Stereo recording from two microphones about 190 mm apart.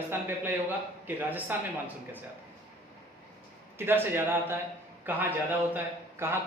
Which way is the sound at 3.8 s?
10° right (ahead or behind).